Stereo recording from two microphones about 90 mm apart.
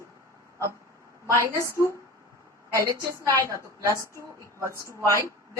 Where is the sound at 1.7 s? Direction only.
30° left (ahead or behind).